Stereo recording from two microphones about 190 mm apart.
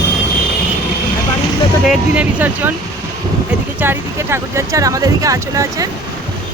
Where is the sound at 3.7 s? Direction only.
10° right (ahead or behind).